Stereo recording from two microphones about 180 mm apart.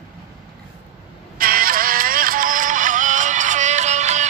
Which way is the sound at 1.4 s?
55° right (ahead or behind).